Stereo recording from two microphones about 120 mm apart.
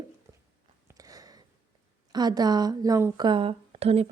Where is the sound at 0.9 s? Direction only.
30° right (ahead or behind).